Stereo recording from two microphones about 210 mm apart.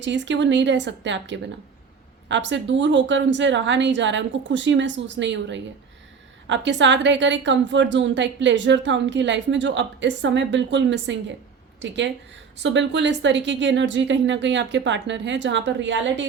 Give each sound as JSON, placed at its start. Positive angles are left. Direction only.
{"t": 0.0, "sound": "a woman's voice", "side_deg": -60}